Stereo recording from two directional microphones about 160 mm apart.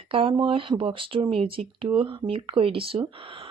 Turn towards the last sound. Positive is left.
turn(degrees=-35)  # may be behind; listen again after turning